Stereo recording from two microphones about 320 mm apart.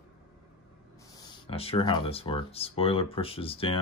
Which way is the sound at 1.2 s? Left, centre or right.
Centre.